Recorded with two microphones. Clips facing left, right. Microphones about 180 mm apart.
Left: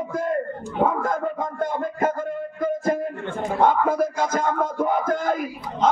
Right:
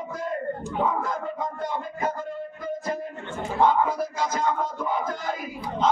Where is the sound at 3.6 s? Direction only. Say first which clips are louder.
Left 2 dB; 50° left (ahead or behind).